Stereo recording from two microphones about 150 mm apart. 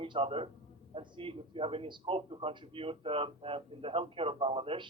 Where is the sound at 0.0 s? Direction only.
35° right (ahead or behind).